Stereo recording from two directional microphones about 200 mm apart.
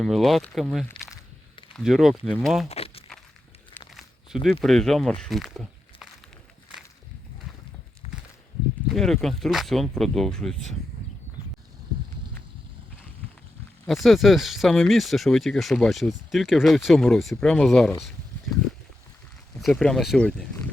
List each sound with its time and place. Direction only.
0.0 s speech: centre (ahead or behind)
0.9 s a sound: 15° left (ahead or behind)
1.7 s speech: centre (ahead or behind)
2.6 s a sound: 30° left (ahead or behind)
3.8 s crumpling: centre (ahead or behind)
4.6 s speech: centre (ahead or behind)
8.0 s a sound: 30° left (ahead or behind)
8.9 s speech: centre (ahead or behind)
13.8 s speech: centre (ahead or behind)
19.5 s speech: centre (ahead or behind)